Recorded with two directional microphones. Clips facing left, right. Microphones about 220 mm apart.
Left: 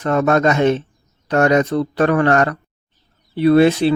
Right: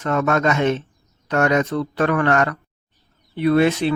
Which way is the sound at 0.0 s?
35° left (ahead or behind).